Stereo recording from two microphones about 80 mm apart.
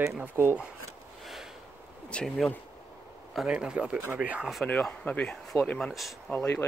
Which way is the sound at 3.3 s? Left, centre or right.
Centre.